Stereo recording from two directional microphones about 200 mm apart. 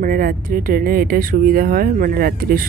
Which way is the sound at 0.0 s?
45° right (ahead or behind).